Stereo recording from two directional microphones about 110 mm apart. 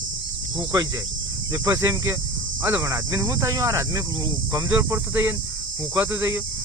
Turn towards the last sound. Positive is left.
turn(degrees=-25)  # may be behind; listen again after turning